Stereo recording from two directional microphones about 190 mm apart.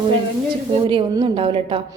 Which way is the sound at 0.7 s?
25° right (ahead or behind).